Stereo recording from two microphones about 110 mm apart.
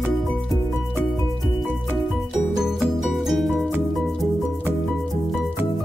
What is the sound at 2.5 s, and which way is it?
Music, 5° right (ahead or behind).